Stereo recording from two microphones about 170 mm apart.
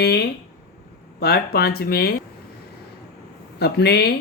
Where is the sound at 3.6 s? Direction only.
70° left (ahead or behind).